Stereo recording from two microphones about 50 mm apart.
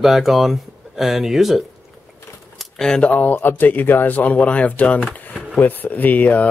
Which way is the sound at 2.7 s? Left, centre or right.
Centre.